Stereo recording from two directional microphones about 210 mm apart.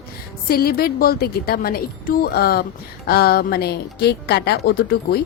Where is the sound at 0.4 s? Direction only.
45° left (ahead or behind).